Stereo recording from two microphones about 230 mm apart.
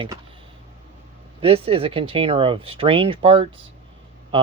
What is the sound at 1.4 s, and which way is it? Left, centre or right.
Speech, right.